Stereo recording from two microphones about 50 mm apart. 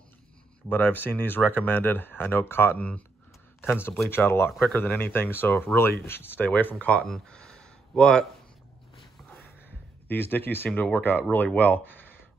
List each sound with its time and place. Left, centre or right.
0.7 s speech: left
7.2 s a sound: centre
10.0 s speech: left